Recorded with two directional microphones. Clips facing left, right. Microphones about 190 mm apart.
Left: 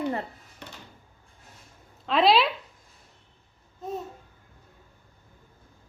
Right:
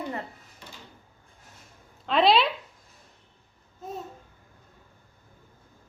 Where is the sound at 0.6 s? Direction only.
65° left (ahead or behind).